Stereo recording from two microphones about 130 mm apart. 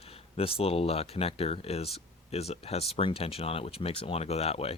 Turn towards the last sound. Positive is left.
turn(degrees=50)  # may be behind; listen again after turning